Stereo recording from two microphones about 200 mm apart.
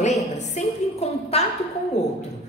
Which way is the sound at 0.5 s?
30° left (ahead or behind).